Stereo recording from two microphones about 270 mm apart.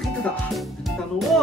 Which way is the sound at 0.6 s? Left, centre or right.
Centre.